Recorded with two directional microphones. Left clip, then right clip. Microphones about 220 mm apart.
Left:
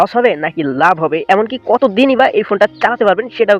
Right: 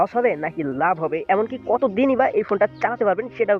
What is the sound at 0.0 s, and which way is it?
Speech, 30° left (ahead or behind).